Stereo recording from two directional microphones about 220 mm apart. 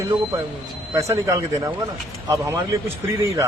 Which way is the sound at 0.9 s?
15° right (ahead or behind).